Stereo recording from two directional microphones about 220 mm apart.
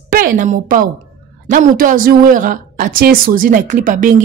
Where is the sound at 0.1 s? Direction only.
40° right (ahead or behind).